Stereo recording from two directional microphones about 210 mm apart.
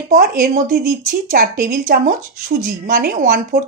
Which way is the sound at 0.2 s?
45° right (ahead or behind).